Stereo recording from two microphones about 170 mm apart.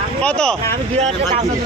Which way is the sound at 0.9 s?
40° right (ahead or behind).